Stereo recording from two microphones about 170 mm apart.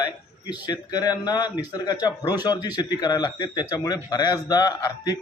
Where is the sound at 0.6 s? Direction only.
25° left (ahead or behind).